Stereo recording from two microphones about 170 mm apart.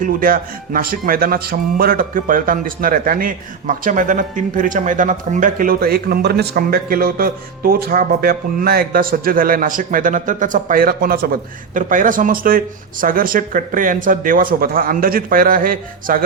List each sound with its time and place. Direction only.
0.0 s speech: 55° right (ahead or behind)